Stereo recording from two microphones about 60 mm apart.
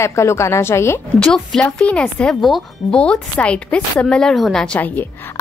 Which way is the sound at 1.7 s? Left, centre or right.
Centre.